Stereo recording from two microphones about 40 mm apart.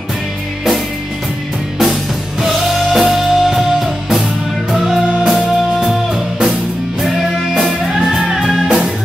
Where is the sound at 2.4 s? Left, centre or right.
Centre.